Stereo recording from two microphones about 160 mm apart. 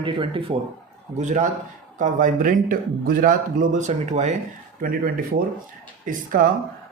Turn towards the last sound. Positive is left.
turn(degrees=-55)  # may be behind; listen again after turning